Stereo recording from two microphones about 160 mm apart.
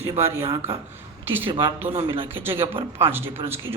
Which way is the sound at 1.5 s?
30° right (ahead or behind).